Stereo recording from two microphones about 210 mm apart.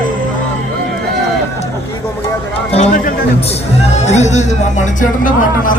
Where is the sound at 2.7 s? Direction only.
35° left (ahead or behind).